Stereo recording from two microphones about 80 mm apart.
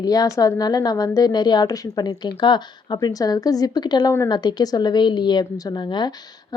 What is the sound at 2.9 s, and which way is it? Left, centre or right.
A woman's voice, left.